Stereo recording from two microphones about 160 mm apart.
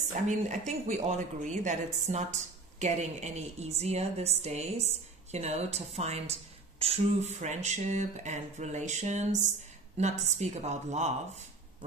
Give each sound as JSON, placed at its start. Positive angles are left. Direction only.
{"t": 0.1, "sound": "a woman's voice", "side_deg": -50}